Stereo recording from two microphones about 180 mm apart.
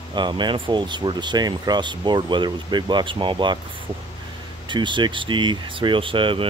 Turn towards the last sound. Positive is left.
turn(degrees=-30)  # may be behind; listen again after turning